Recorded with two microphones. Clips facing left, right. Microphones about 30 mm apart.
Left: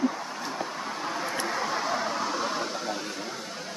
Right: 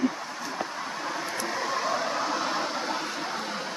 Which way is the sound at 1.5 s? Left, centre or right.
Centre.